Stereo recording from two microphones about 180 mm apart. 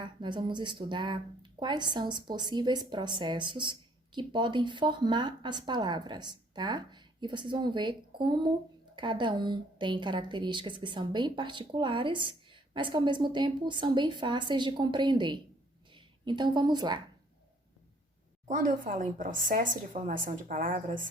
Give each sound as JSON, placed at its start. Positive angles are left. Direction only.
{"t": 0.0, "sound": "a woman's voice", "side_deg": -25}
{"t": 18.4, "sound": "a woman's voice", "side_deg": -45}